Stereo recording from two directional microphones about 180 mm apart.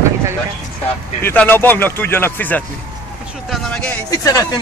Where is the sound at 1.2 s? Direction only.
10° left (ahead or behind).